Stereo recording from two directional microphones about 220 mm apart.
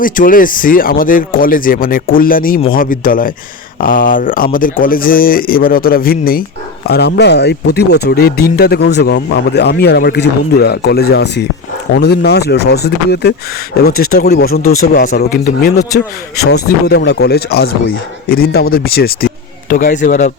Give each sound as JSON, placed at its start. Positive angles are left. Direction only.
{"t": 0.0, "sound": "speech", "side_deg": 40}
{"t": 14.6, "sound": "speech", "side_deg": 70}
{"t": 14.9, "sound": "speech", "side_deg": 45}